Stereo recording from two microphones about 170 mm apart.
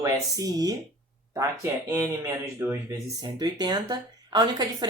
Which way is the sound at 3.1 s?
25° right (ahead or behind).